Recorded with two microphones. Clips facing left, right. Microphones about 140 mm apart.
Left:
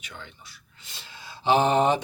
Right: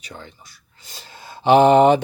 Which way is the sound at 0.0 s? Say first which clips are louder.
Right 5 dB; 40° right (ahead or behind).